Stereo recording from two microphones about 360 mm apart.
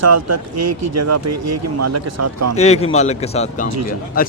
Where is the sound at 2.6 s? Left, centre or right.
Centre.